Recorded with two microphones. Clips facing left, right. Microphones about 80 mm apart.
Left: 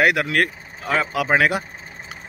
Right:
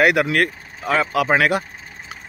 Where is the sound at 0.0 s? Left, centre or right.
Centre.